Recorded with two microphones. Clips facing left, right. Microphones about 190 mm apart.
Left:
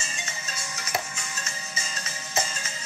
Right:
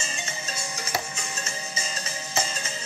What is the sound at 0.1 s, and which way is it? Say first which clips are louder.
Music: right 3 dB; 30° right (ahead or behind).